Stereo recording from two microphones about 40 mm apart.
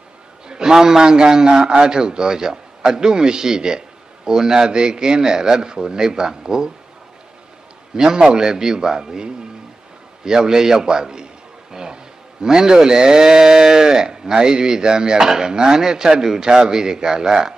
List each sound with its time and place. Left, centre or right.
0.5 s a man's voice: centre
7.9 s speech: centre